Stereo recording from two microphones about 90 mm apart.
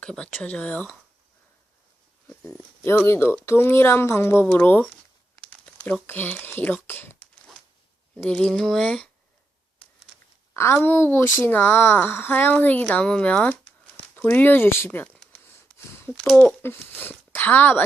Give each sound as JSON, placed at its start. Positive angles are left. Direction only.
{"t": 0.0, "sound": "speech", "side_deg": 10}
{"t": 2.2, "sound": "dog", "side_deg": 10}
{"t": 2.8, "sound": "speech", "side_deg": 30}
{"t": 5.4, "sound": "crumpling", "side_deg": 15}
{"t": 6.1, "sound": "speech", "side_deg": 25}
{"t": 8.3, "sound": "speech", "side_deg": 10}
{"t": 10.5, "sound": "a woman's voice", "side_deg": 30}
{"t": 13.5, "sound": "a sound", "side_deg": 25}
{"t": 16.2, "sound": "speech", "side_deg": 5}
{"t": 16.6, "sound": "speech", "side_deg": 25}